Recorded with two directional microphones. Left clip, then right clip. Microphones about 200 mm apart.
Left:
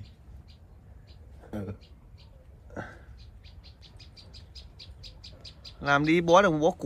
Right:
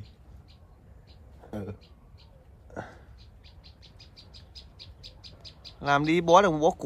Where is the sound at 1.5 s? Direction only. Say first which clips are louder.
Even; 35° right (ahead or behind).